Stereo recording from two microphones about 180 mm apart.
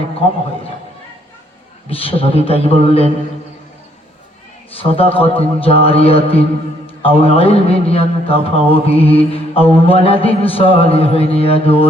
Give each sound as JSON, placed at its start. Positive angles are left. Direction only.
{"t": 1.9, "sound": "speech", "side_deg": 30}
{"t": 4.8, "sound": "speech", "side_deg": 30}